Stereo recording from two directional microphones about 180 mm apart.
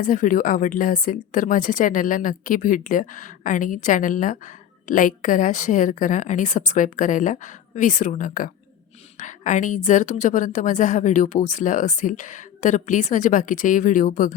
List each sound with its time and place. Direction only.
0.0 s a woman's voice: 50° left (ahead or behind)